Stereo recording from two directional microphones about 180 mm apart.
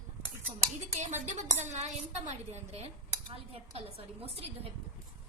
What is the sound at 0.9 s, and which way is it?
Speech, 40° right (ahead or behind).